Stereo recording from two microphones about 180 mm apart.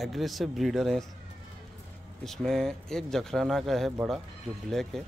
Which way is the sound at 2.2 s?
Centre (ahead or behind).